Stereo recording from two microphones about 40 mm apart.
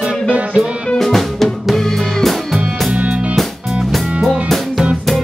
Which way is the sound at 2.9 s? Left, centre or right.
Right.